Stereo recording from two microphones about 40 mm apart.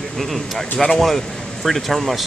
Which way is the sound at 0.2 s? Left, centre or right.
Centre.